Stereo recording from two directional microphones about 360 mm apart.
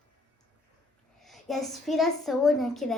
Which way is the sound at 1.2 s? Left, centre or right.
Centre.